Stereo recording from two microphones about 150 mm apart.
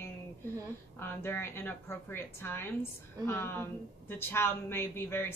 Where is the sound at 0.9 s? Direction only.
15° left (ahead or behind).